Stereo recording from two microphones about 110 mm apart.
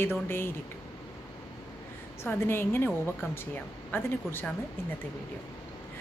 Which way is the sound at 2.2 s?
20° left (ahead or behind).